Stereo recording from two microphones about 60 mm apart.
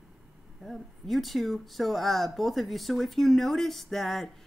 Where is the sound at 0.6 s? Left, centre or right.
Centre.